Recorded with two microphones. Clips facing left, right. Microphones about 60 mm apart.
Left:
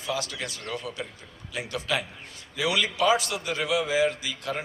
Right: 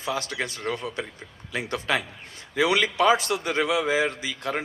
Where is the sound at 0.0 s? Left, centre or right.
Right.